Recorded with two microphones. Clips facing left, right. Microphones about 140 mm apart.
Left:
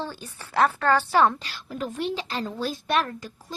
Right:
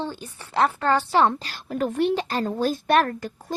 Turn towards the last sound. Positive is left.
turn(degrees=-55)  # may be behind; listen again after turning